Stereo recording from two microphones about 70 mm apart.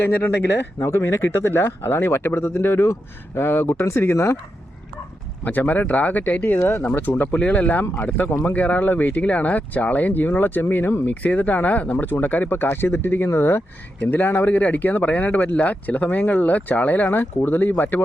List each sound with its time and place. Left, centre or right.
0.0 s speech: left
0.9 s speech: left
5.4 s speech: left